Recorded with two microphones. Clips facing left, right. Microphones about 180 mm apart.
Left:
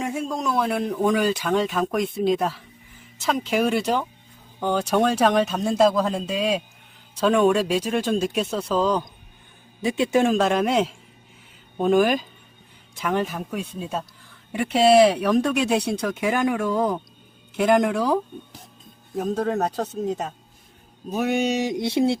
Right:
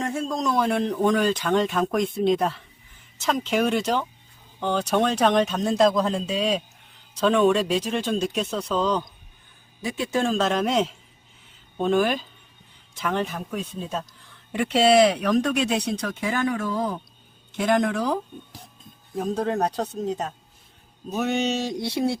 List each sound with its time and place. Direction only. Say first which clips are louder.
0.0 s a man's voice: even; 10° left (ahead or behind)
9.8 s speech: left 5 dB; 20° left (ahead or behind)
15.0 s speech: left 2 dB; 5° left (ahead or behind)
19.1 s a man's voice: left 1 dB; 5° left (ahead or behind); by 22.2 s 25° left (ahead or behind)